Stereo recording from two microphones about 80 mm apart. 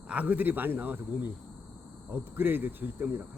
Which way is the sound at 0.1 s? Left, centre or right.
Centre.